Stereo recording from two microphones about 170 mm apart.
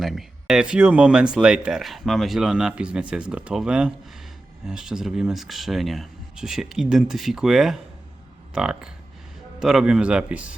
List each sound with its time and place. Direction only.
0.0 s speech: centre (ahead or behind)